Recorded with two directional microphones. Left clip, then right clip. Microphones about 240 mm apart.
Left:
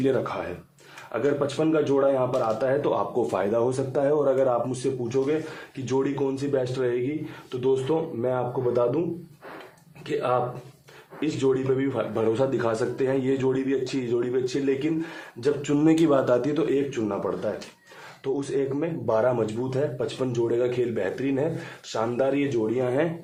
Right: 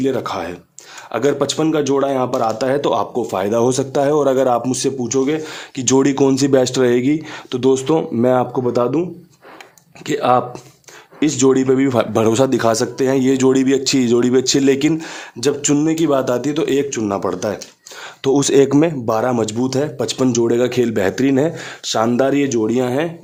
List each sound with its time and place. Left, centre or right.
0.0 s a man's voice: right
0.3 s a man's voice: right
10.1 s a man's voice: right
15.8 s a man's voice: right
16.6 s a man's voice: right